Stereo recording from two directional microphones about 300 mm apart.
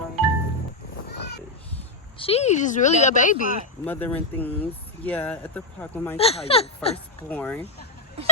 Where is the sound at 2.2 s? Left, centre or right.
Left.